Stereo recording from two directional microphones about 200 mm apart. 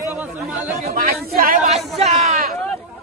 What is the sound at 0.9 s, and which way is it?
Speech, 50° right (ahead or behind).